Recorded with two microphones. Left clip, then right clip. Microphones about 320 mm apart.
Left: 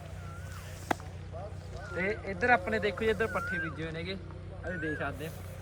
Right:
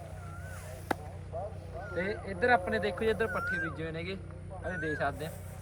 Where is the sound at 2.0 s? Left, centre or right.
Centre.